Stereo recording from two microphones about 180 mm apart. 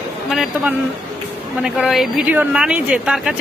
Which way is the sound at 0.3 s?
Centre (ahead or behind).